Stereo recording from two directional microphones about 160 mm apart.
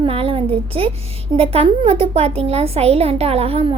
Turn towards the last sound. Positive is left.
turn(degrees=-35)  # may be behind; listen again after turning